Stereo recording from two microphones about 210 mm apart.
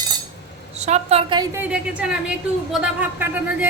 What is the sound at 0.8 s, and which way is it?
Speech, 30° right (ahead or behind).